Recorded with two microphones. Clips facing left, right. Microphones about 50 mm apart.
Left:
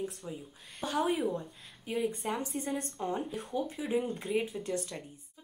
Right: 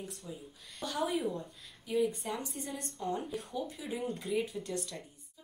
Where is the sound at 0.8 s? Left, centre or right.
Left.